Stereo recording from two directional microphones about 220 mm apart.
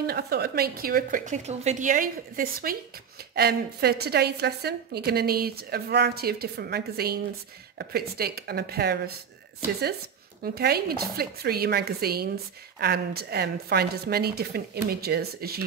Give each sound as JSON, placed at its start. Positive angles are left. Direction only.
{"t": 0.0, "sound": "a woman's voice", "side_deg": -45}
{"t": 10.4, "sound": "a woman's voice", "side_deg": -45}